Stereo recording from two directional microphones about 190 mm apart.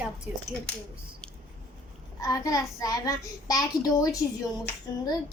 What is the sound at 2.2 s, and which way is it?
A child's voice, 20° left (ahead or behind).